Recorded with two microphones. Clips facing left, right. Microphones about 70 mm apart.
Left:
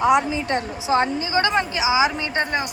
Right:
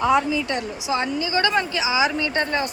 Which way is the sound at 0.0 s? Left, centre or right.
Centre.